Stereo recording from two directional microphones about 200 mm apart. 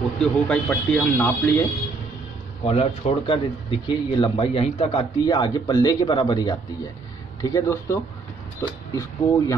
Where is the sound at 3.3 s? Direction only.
25° left (ahead or behind).